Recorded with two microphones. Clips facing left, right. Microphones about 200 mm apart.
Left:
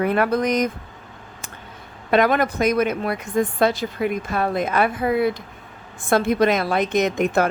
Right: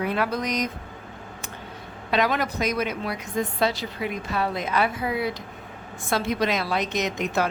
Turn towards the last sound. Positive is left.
turn(degrees=50)  # may be behind; listen again after turning